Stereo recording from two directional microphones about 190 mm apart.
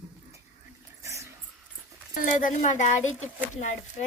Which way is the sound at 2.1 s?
45° left (ahead or behind).